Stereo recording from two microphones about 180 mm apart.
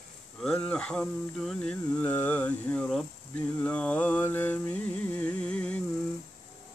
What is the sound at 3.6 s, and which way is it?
Mantra, 5° left (ahead or behind).